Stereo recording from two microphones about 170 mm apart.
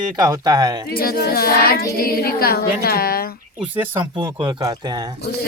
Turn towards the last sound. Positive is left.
turn(degrees=-25)  # may be behind; listen again after turning